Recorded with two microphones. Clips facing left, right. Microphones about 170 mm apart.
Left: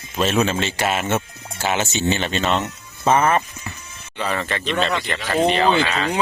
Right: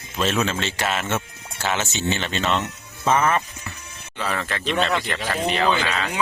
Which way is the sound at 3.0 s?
35° left (ahead or behind).